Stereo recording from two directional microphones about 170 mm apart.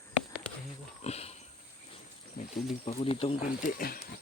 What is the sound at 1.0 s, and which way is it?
Speech, 40° left (ahead or behind).